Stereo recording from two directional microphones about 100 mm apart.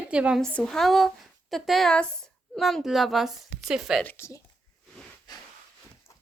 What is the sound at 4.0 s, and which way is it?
Speech, 15° left (ahead or behind).